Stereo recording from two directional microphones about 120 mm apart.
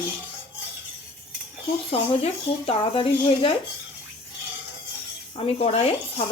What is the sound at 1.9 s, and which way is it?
Speech, 60° left (ahead or behind).